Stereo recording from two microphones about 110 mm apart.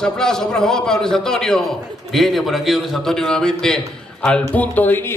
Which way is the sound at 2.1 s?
Centre (ahead or behind).